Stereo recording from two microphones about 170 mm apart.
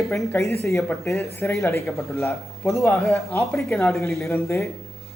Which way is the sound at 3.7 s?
15° left (ahead or behind).